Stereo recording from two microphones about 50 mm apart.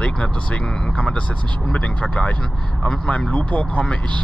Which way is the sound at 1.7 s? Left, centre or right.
Left.